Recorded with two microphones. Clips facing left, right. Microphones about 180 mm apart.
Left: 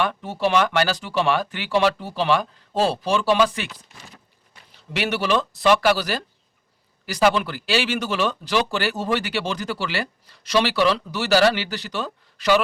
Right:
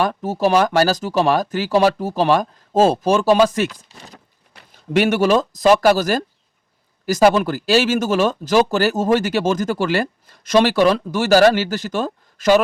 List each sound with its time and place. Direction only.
0.0 s speech: 40° right (ahead or behind)
4.7 s speech: 45° right (ahead or behind)